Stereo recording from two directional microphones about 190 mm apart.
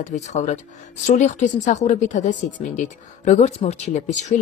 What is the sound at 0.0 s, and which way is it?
Speech, 40° left (ahead or behind).